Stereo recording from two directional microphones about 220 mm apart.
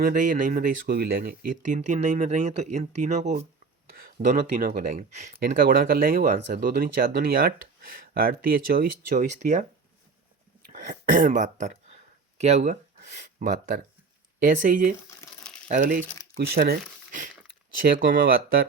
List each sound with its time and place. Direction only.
0.0 s speech: 40° right (ahead or behind)
10.7 s speech: 40° right (ahead or behind)
16.4 s a sound: 45° right (ahead or behind)
18.0 s speech: 40° right (ahead or behind)